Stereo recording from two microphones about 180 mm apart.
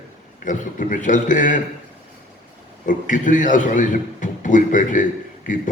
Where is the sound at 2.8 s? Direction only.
45° left (ahead or behind).